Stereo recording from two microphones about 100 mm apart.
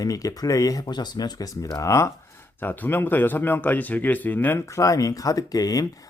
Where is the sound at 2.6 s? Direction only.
20° left (ahead or behind).